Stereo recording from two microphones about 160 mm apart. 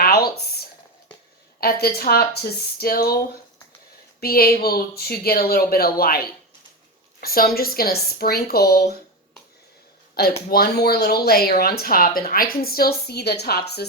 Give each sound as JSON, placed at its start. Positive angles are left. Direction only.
{"t": 0.0, "sound": "a sound", "side_deg": 75}
{"t": 1.6, "sound": "speech", "side_deg": 70}
{"t": 10.2, "sound": "speech", "side_deg": 75}